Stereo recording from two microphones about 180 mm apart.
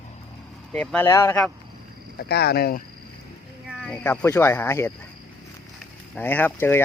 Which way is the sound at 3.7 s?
5° left (ahead or behind).